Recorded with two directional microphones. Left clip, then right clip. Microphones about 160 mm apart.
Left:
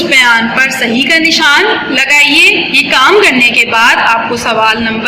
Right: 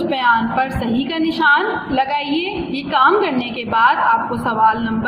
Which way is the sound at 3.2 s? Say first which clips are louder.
Left 15 dB; 55° right (ahead or behind).